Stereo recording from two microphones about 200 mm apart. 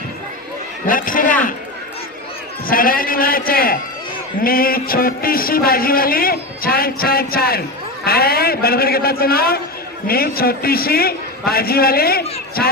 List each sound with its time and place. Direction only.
0.9 s a man's voice: 45° left (ahead or behind)
2.6 s a man's voice: 45° left (ahead or behind)